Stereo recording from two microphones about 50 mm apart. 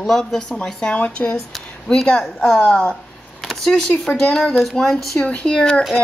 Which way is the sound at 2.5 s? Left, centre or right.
Centre.